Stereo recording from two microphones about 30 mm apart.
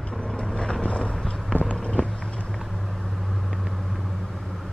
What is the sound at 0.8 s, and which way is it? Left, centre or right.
Vehicle, left.